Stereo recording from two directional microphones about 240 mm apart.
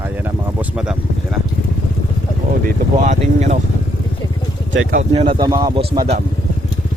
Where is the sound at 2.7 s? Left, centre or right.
Right.